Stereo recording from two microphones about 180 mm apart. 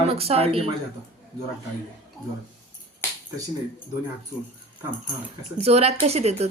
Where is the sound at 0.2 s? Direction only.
35° right (ahead or behind).